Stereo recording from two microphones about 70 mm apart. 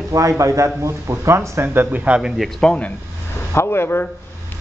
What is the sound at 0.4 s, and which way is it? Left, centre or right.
A man's voice, right.